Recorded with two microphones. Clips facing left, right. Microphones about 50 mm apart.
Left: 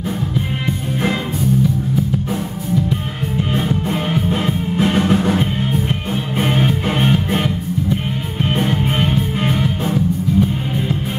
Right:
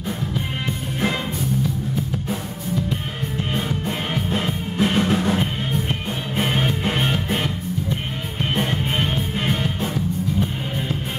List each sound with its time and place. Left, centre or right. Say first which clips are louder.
3.5 s music: left 5 dB; centre
6.4 s music: left 4 dB; centre
7.0 s music: left 5 dB; left
9.5 s music: left 5 dB; left